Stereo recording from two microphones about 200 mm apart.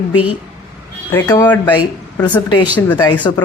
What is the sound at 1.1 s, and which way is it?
Speech, 20° left (ahead or behind).